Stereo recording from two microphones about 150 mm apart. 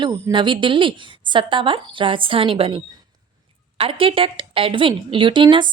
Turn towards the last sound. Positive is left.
turn(degrees=-30)  # may be behind; listen again after turning